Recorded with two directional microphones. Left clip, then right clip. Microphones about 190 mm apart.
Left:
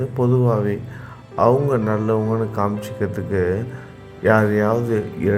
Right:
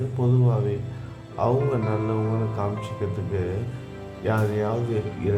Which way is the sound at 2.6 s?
25° left (ahead or behind).